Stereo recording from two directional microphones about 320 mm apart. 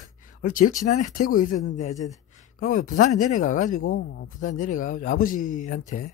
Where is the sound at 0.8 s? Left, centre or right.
Left.